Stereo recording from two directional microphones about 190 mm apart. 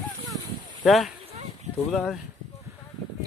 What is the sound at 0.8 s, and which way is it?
Speech, centre (ahead or behind).